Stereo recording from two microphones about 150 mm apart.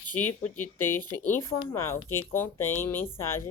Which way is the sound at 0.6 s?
15° left (ahead or behind).